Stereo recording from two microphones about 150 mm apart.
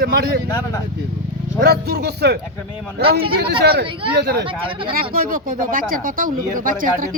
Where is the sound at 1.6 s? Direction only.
90° right.